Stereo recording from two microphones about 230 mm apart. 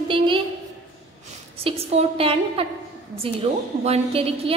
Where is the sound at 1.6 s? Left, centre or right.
Right.